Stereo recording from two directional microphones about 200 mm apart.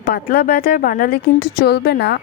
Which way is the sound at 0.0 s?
50° left (ahead or behind).